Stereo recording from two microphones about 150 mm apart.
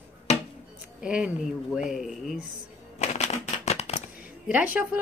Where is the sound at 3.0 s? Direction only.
45° left (ahead or behind).